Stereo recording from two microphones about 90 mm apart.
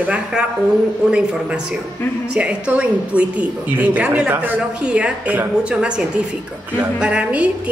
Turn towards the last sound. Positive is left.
turn(degrees=-15)  # may be behind; listen again after turning